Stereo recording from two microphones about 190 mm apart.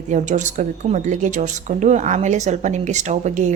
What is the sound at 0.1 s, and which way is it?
A woman's voice, 40° right (ahead or behind).